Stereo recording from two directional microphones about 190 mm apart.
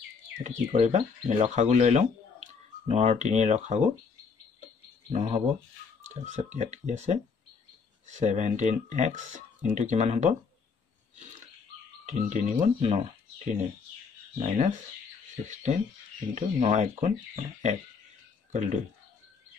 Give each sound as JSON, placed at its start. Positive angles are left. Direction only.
{"t": 0.4, "sound": "speech", "side_deg": -40}
{"t": 5.1, "sound": "speech", "side_deg": -35}
{"t": 12.1, "sound": "speech", "side_deg": -40}
{"t": 14.4, "sound": "speech", "side_deg": -40}
{"t": 18.5, "sound": "speech", "side_deg": -40}